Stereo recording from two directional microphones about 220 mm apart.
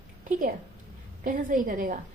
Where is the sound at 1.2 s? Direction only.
35° right (ahead or behind).